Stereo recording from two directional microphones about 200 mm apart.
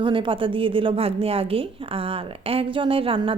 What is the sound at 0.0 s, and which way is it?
A woman's voice, 25° right (ahead or behind).